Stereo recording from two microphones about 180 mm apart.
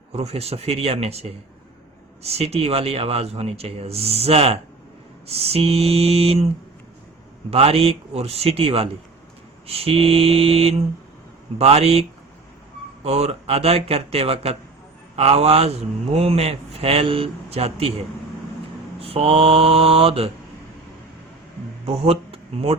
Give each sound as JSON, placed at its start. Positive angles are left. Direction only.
{"t": 0.1, "sound": "speech", "side_deg": -35}
{"t": 7.5, "sound": "speech", "side_deg": -35}
{"t": 13.1, "sound": "speech", "side_deg": -35}
{"t": 21.8, "sound": "speech", "side_deg": -35}